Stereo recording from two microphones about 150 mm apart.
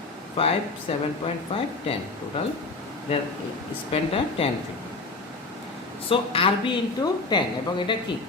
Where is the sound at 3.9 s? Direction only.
40° left (ahead or behind).